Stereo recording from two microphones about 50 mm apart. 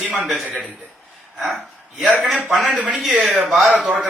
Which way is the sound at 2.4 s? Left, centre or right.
Centre.